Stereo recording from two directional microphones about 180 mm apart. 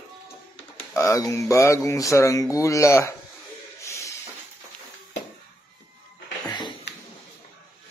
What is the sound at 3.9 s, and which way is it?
Music, 15° left (ahead or behind).